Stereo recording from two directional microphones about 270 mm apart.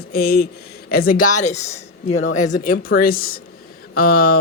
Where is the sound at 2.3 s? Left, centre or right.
Left.